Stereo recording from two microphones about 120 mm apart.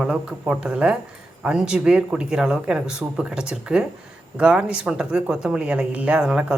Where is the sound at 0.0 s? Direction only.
5° right (ahead or behind).